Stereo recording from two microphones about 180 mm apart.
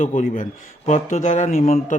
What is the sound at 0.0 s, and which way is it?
A man's voice, 45° left (ahead or behind).